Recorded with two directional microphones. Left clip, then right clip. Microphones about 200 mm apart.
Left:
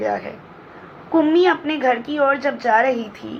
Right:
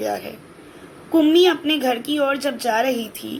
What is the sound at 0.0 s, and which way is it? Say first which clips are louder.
Speech: left 2 dB; 15° right (ahead or behind).